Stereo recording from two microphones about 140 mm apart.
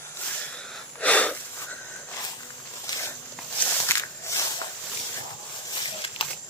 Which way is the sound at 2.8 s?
20° left (ahead or behind).